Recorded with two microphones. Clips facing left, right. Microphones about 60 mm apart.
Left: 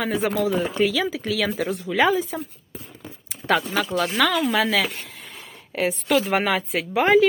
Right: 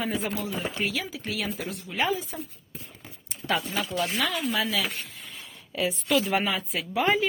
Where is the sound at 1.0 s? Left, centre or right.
Left.